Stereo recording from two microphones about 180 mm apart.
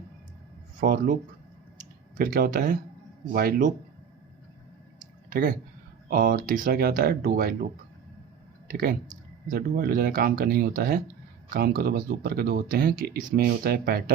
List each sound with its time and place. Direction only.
0.8 s speech: 50° right (ahead or behind)
2.1 s speech: 55° right (ahead or behind)
5.3 s speech: 55° right (ahead or behind)